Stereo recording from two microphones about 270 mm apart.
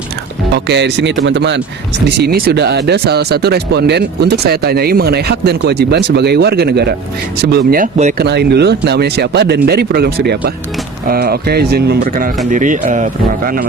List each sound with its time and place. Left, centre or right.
0.5 s speech: right